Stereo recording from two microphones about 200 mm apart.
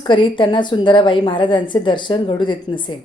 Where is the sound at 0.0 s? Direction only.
25° left (ahead or behind).